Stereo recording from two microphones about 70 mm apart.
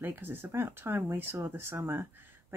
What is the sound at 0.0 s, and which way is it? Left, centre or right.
Speech, right.